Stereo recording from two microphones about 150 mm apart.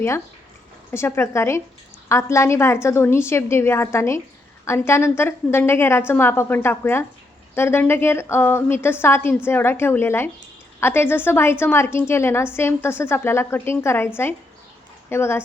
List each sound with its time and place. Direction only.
0.9 s a woman's voice: 15° left (ahead or behind)